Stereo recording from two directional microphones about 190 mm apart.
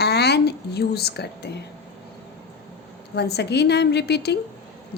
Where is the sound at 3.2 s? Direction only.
60° left (ahead or behind).